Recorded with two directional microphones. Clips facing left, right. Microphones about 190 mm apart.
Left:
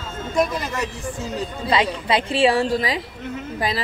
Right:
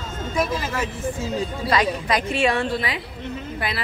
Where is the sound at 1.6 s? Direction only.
25° left (ahead or behind).